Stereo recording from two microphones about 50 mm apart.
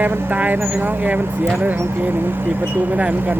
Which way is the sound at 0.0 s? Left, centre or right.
Right.